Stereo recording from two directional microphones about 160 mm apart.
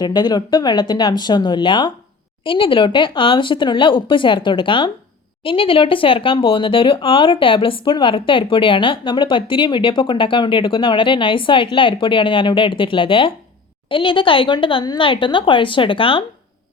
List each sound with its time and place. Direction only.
0.0 s speech: 25° left (ahead or behind)